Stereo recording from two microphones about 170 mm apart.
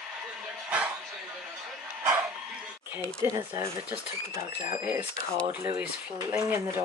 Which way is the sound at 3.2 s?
15° right (ahead or behind).